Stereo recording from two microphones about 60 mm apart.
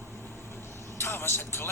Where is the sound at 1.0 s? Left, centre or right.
Left.